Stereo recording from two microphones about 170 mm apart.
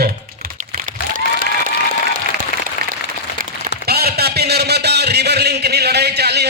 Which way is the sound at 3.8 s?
70° right (ahead or behind).